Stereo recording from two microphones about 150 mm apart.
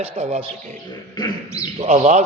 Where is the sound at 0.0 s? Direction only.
45° right (ahead or behind).